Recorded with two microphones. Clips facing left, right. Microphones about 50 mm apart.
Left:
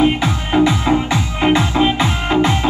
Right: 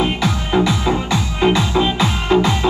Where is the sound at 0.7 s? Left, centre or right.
Centre.